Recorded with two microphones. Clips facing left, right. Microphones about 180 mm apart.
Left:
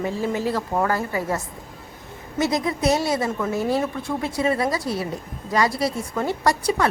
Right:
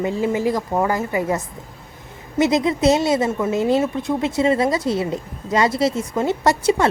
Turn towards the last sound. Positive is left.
turn(degrees=-25)  # may be behind; listen again after turning